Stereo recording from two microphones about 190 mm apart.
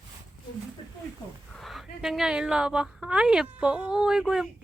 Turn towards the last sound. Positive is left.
turn(degrees=-5)  # may be behind; listen again after turning